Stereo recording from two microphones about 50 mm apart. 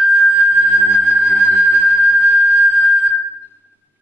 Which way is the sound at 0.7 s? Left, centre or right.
Centre.